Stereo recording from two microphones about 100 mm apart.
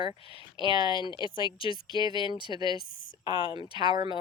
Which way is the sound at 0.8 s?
50° left (ahead or behind).